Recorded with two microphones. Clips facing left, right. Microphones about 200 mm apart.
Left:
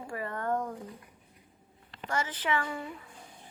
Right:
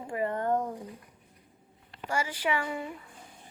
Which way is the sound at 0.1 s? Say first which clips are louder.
Right 4 dB; 20° right (ahead or behind).